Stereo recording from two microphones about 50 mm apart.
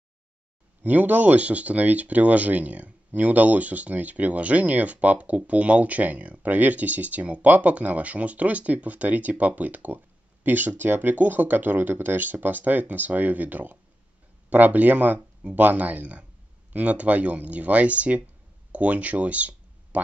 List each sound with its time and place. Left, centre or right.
0.8 s speech: right